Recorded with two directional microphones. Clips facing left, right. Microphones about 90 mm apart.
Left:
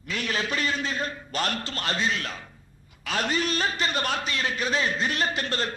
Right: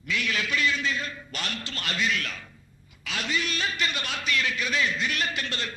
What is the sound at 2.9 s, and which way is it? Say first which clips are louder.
A man's voice: left 3 dB; 45° left (ahead or behind).